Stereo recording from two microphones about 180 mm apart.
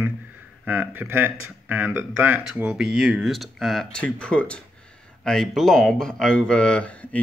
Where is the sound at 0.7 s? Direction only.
10° right (ahead or behind).